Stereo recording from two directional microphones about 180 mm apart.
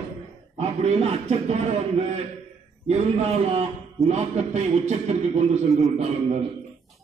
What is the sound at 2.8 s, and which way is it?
A man's voice, 35° right (ahead or behind).